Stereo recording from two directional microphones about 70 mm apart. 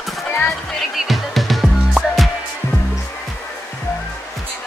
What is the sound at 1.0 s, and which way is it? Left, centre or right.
Music, centre.